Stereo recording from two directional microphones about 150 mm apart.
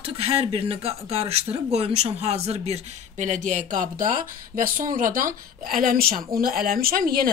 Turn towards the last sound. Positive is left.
turn(degrees=-75)  # may be behind; listen again after turning